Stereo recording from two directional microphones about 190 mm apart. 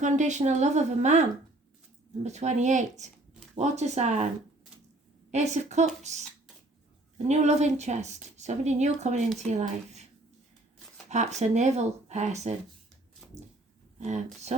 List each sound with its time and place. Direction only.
0.0 s a woman's voice: 40° right (ahead or behind)
5.3 s a woman's voice: 35° right (ahead or behind)
7.3 s a woman's voice: 35° right (ahead or behind)
11.1 s a woman's voice: 35° right (ahead or behind)
13.2 s a sound: 5° left (ahead or behind)